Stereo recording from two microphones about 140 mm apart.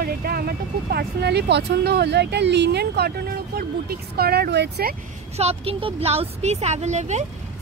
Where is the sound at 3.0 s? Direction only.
90° right.